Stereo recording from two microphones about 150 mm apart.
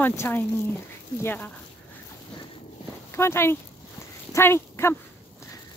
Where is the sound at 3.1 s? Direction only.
15° left (ahead or behind).